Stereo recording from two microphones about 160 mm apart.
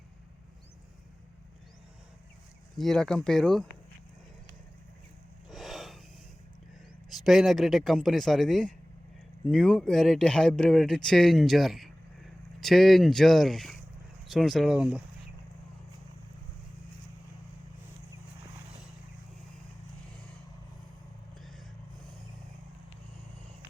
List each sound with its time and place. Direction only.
2.7 s speech: 5° left (ahead or behind)
5.5 s snort: centre (ahead or behind)
7.3 s speech: centre (ahead or behind)